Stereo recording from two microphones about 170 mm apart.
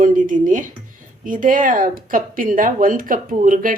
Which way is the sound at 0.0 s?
50° right (ahead or behind).